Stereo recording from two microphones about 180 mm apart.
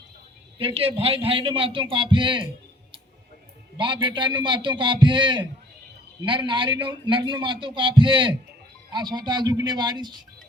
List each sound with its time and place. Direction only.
0.6 s a man's voice: 30° right (ahead or behind)
3.8 s a man's voice: 25° right (ahead or behind)